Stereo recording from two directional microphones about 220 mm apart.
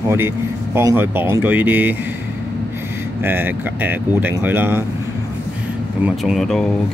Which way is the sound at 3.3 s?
10° right (ahead or behind).